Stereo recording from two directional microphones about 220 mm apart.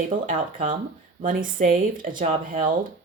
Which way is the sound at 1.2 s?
35° right (ahead or behind).